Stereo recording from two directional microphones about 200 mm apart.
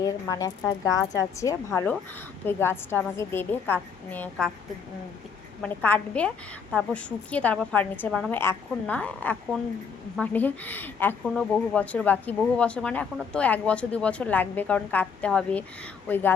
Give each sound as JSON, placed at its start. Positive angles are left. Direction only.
{"t": 0.0, "sound": "a woman's voice", "side_deg": 15}
{"t": 5.6, "sound": "a woman's voice", "side_deg": 10}